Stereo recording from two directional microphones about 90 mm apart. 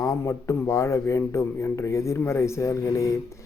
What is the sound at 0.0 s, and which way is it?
Speech, 35° left (ahead or behind).